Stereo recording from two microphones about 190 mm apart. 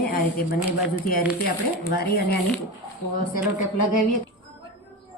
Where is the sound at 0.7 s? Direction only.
5° right (ahead or behind).